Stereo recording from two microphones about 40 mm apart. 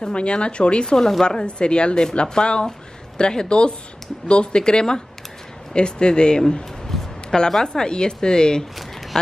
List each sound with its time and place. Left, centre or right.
0.0 s a woman's voice: left
6.9 s a sound: centre
7.6 s a woman's voice: centre